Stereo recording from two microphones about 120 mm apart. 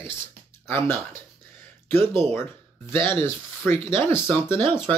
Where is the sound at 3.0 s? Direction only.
45° right (ahead or behind).